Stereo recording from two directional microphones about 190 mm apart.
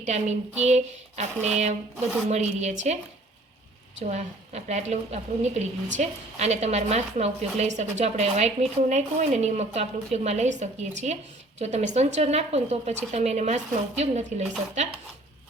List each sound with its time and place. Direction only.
0.0 s a woman's voice: 35° right (ahead or behind)
4.0 s a woman's voice: 40° right (ahead or behind)